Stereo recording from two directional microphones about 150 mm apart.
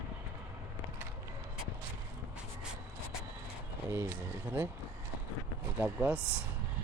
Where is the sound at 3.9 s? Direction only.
15° right (ahead or behind).